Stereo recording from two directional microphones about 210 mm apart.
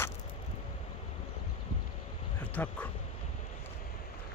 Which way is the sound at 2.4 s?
10° left (ahead or behind).